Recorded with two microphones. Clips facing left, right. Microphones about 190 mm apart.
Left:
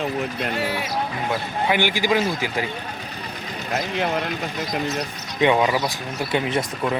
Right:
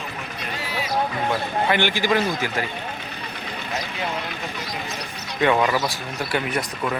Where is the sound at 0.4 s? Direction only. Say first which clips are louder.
Left 5 dB; 65° left (ahead or behind).